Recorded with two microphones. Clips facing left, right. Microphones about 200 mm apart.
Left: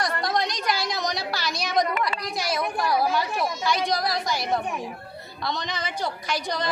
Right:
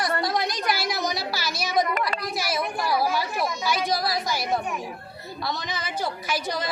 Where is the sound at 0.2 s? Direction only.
5° right (ahead or behind).